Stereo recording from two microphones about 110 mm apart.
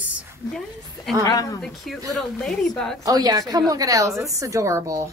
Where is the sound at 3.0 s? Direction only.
35° right (ahead or behind).